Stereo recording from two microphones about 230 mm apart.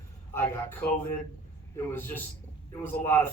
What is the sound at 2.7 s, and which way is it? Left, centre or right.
Speech, centre.